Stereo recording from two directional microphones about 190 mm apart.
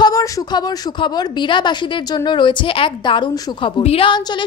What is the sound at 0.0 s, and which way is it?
A woman's voice, 20° left (ahead or behind).